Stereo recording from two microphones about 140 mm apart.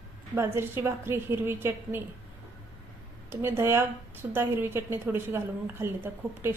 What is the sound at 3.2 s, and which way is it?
Speech, 15° right (ahead or behind).